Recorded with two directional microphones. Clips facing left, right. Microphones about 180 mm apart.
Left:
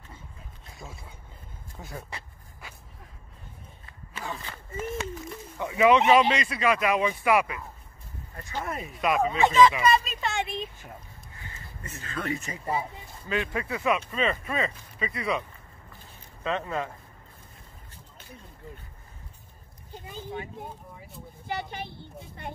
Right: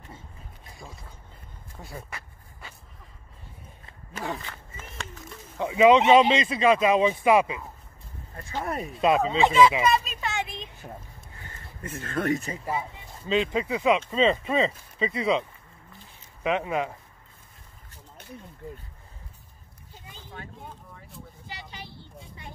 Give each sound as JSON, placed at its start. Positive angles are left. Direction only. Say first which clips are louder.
{"t": 1.8, "sound": "speech", "louder": "even", "side_deg": 0}
{"t": 4.1, "sound": "speech", "louder": "right 4 dB", "side_deg": -55}
{"t": 5.6, "sound": "speech", "louder": "right 3 dB", "side_deg": -20}
{"t": 8.6, "sound": "speech", "louder": "right 5 dB", "side_deg": -35}
{"t": 9.8, "sound": "speech", "louder": "left 1 dB", "side_deg": 0}
{"t": 10.8, "sound": "speech", "louder": "right 4 dB", "side_deg": -35}
{"t": 11.8, "sound": "speech", "louder": "right 6 dB", "side_deg": -55}
{"t": 13.3, "sound": "speech", "louder": "right 5 dB", "side_deg": -20}
{"t": 16.4, "sound": "speech", "louder": "right 4 dB", "side_deg": -15}
{"t": 21.5, "sound": "a child's voice", "louder": "left 11 dB", "side_deg": 55}